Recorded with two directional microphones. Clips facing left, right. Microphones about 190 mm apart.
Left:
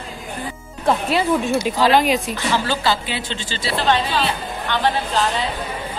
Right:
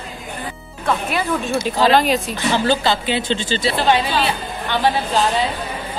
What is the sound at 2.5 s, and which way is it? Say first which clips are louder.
A woman's voice: right 3 dB; 20° right (ahead or behind).